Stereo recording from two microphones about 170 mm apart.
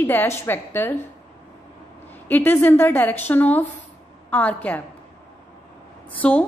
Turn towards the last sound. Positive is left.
turn(degrees=10)  # may be behind; listen again after turning